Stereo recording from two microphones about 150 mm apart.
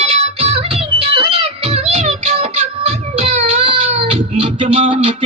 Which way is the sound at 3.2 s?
50° right (ahead or behind).